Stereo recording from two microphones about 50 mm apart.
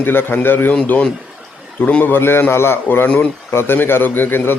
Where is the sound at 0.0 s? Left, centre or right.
Left.